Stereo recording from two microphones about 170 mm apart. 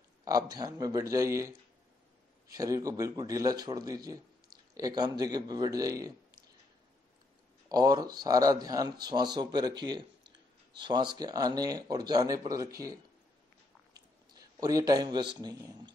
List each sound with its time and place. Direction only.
0.2 s speech: 20° right (ahead or behind)
7.7 s speech: 25° right (ahead or behind)
14.6 s speech: 20° right (ahead or behind)